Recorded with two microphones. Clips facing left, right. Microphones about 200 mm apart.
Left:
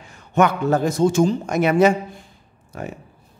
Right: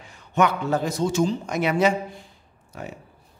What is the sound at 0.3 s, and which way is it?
A man's voice, 45° left (ahead or behind).